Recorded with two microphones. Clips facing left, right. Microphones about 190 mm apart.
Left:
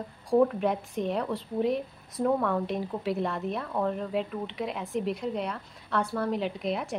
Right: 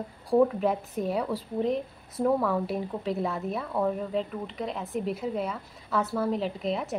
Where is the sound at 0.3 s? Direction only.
Centre (ahead or behind).